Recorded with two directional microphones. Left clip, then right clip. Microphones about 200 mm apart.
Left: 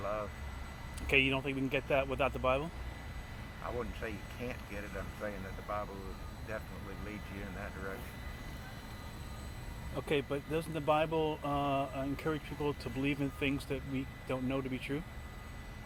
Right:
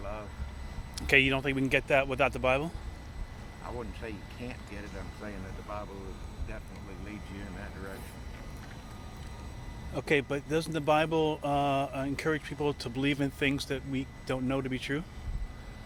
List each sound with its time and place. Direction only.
1.0 s speech: 50° right (ahead or behind)
3.8 s speech: 5° right (ahead or behind)
9.9 s speech: 55° right (ahead or behind)